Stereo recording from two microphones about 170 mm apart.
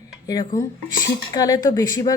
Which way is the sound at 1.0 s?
20° left (ahead or behind).